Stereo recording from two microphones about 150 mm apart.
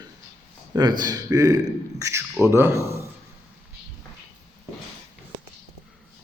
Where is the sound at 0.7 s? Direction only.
25° right (ahead or behind).